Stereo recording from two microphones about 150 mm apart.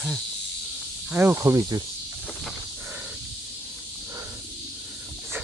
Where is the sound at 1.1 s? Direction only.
15° right (ahead or behind).